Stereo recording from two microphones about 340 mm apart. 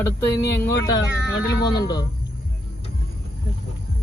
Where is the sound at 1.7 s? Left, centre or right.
Centre.